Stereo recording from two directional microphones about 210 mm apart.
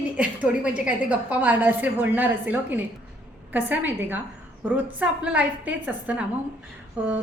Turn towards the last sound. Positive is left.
turn(degrees=-5)  # may be behind; listen again after turning